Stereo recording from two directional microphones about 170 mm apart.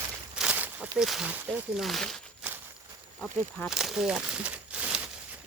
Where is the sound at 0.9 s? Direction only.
Centre (ahead or behind).